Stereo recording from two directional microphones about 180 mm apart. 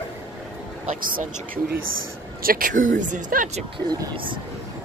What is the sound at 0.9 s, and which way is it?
Speech, 45° right (ahead or behind).